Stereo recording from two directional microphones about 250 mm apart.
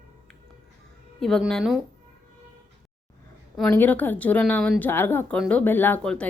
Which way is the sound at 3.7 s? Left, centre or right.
Centre.